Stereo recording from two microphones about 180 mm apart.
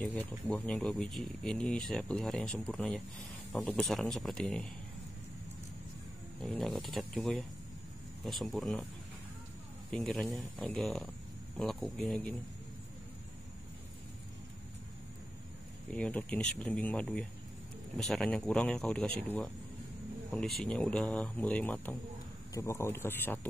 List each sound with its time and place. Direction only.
0.0 s speech: 10° left (ahead or behind)
6.4 s speech: centre (ahead or behind)
9.8 s speech: 5° left (ahead or behind)
15.9 s speech: 5° left (ahead or behind)
20.2 s speech: 5° left (ahead or behind)